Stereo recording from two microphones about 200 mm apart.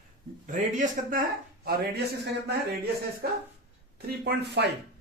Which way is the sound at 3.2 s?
50° right (ahead or behind).